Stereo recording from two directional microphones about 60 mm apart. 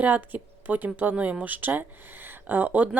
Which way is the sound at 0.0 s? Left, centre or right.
Right.